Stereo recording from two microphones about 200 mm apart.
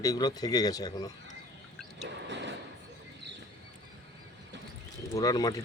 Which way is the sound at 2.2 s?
65° right (ahead or behind).